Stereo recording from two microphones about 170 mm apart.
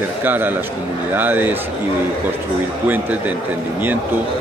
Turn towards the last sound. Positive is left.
turn(degrees=-10)  # may be behind; listen again after turning